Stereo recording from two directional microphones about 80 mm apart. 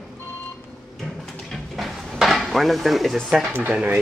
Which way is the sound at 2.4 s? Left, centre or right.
Centre.